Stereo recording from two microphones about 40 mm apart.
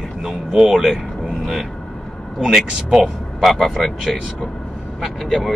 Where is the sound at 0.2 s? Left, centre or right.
Centre.